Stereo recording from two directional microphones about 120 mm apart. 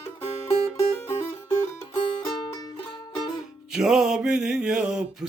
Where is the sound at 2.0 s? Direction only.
45° left (ahead or behind).